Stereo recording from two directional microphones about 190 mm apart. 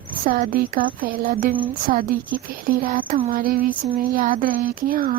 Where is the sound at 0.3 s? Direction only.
50° right (ahead or behind).